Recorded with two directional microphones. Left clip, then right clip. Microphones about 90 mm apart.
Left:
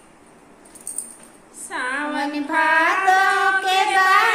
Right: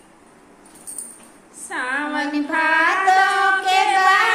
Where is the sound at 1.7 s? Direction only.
20° right (ahead or behind).